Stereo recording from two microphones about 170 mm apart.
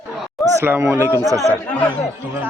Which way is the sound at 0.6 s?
15° right (ahead or behind).